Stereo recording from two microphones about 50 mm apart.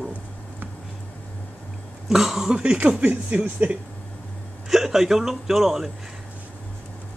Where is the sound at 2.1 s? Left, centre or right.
Centre.